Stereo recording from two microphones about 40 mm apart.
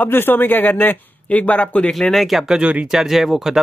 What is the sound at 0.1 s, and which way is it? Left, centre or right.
Speech, left.